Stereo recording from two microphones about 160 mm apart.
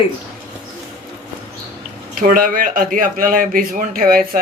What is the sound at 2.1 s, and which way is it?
Speech, 60° right (ahead or behind).